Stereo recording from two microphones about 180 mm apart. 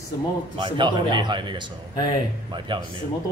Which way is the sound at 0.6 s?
25° right (ahead or behind).